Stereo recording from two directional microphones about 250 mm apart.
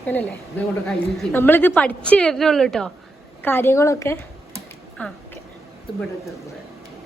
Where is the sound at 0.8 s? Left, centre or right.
Centre.